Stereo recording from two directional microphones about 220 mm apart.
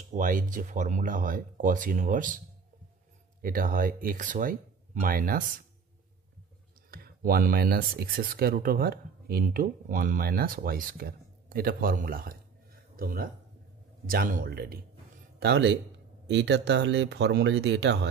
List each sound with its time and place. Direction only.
0.1 s speech: 35° right (ahead or behind)
3.4 s speech: 40° right (ahead or behind)
6.9 s speech: 40° right (ahead or behind)